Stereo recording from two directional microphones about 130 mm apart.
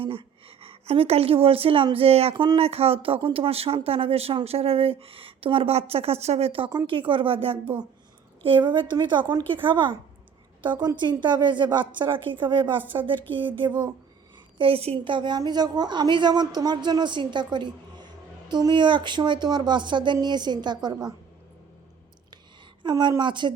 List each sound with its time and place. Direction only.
0.0 s a woman's voice: 45° right (ahead or behind)
2.3 s a woman's voice: 35° right (ahead or behind)
2.6 s speech: 50° right (ahead or behind)
6.7 s a woman's voice: 35° right (ahead or behind)
22.8 s a woman's voice: 35° right (ahead or behind)